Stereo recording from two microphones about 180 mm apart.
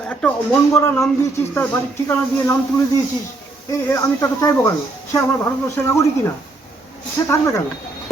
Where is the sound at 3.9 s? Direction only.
20° left (ahead or behind).